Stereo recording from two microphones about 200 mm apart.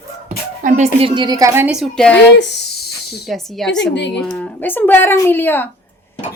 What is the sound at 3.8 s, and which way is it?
Speech, 60° left (ahead or behind).